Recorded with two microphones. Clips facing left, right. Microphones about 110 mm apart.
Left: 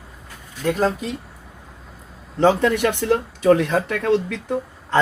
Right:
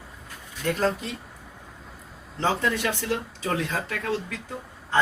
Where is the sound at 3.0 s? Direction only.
60° left (ahead or behind).